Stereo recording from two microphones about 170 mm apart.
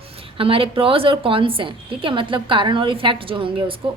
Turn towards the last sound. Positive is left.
turn(degrees=-30)  # may be behind; listen again after turning